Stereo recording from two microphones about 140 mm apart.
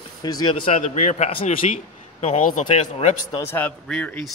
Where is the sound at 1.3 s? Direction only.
40° left (ahead or behind).